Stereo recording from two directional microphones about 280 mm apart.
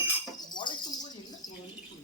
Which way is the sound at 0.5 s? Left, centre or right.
Centre.